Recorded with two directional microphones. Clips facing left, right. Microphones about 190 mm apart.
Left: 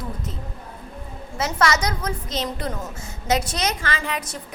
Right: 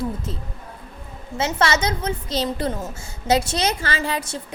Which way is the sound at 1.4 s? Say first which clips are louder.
Right 1 dB; 25° right (ahead or behind).